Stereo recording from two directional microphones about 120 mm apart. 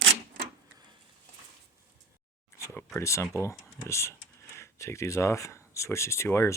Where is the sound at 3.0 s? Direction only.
25° left (ahead or behind).